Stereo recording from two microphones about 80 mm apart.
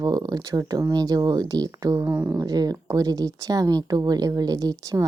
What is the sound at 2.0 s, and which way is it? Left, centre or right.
Speech, right.